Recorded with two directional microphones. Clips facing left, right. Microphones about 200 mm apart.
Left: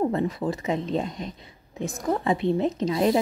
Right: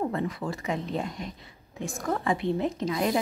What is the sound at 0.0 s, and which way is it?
A woman's voice, 25° left (ahead or behind).